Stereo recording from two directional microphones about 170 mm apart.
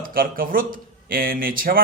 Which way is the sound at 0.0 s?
55° right (ahead or behind).